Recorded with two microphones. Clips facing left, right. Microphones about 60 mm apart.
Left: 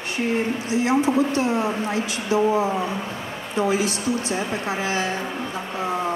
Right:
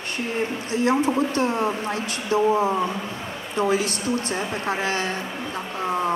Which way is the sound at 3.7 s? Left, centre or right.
Right.